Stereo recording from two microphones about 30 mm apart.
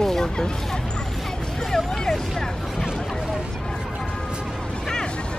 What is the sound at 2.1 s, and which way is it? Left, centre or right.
Speech, centre.